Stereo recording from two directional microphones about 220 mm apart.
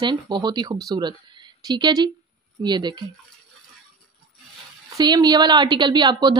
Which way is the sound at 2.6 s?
20° right (ahead or behind).